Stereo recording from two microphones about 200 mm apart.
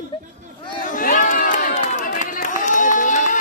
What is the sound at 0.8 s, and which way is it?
Run, 45° left (ahead or behind).